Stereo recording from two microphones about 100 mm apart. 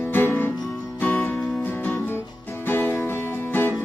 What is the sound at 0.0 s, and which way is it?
Music, 20° left (ahead or behind).